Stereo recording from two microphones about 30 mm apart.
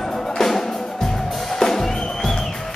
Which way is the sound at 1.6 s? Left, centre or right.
Centre.